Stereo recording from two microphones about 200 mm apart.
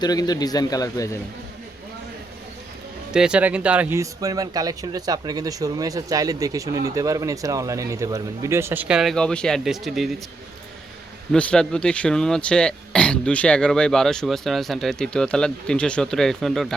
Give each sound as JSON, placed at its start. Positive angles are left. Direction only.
{"t": 0.0, "sound": "a man's voice", "side_deg": 20}
{"t": 3.1, "sound": "speech", "side_deg": -5}
{"t": 11.3, "sound": "speech", "side_deg": 5}